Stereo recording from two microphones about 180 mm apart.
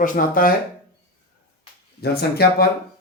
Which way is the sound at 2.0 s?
60° left (ahead or behind).